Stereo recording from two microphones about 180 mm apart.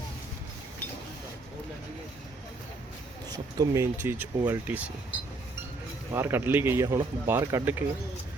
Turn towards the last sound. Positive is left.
turn(degrees=-15)  # may be behind; listen again after turning